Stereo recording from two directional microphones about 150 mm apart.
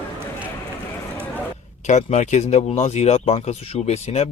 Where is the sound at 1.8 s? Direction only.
50° left (ahead or behind).